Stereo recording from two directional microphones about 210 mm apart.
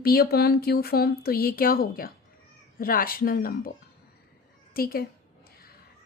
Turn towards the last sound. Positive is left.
turn(degrees=45)  # may be behind; listen again after turning